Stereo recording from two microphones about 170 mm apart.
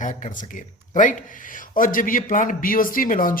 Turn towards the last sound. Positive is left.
turn(degrees=55)  # may be behind; listen again after turning